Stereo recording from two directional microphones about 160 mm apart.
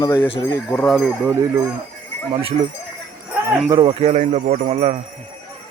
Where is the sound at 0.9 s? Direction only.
Centre (ahead or behind).